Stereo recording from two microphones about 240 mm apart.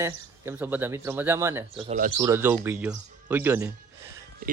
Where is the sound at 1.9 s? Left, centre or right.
Right.